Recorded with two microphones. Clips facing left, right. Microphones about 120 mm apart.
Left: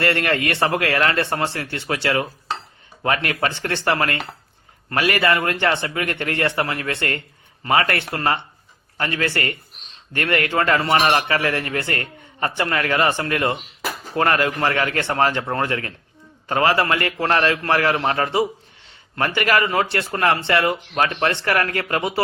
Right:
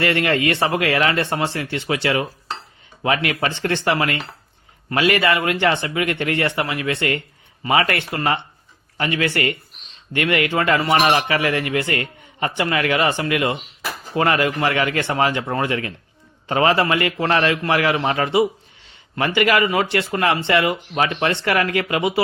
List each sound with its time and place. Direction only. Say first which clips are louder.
0.0 s speech: right 2 dB; 15° right (ahead or behind)